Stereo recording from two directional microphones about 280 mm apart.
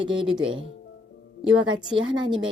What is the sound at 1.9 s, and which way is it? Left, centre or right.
Speech, centre.